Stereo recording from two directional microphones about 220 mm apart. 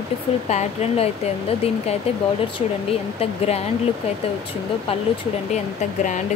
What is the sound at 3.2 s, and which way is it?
Speech, 30° left (ahead or behind).